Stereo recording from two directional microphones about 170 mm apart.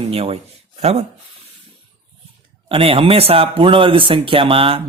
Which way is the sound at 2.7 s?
30° right (ahead or behind).